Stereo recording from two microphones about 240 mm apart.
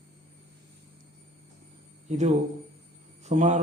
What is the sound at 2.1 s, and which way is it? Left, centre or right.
A man's voice, right.